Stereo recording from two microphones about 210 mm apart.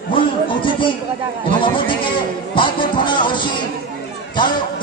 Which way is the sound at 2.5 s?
25° left (ahead or behind).